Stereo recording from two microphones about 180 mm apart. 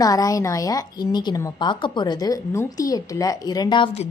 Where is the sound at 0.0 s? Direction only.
20° left (ahead or behind).